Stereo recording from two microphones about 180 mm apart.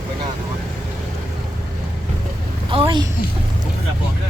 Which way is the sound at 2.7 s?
30° right (ahead or behind).